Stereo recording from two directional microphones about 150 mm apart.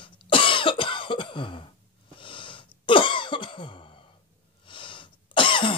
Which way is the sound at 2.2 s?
35° left (ahead or behind).